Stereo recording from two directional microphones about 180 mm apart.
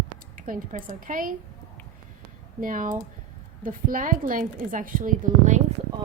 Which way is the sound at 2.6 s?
50° right (ahead or behind).